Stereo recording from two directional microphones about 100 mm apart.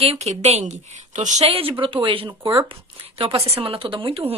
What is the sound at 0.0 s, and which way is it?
Speech, 90° right.